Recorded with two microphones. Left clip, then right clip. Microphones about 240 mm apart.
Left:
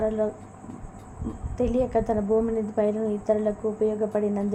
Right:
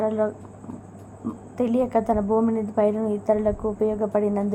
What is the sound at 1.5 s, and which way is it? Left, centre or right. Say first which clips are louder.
A woman's voice: right 2 dB; right.